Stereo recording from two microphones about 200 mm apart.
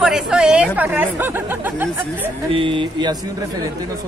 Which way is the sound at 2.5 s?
25° right (ahead or behind).